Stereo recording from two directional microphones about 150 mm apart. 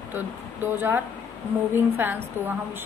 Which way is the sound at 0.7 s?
15° right (ahead or behind).